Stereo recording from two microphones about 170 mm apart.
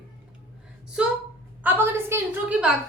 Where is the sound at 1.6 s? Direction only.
10° right (ahead or behind).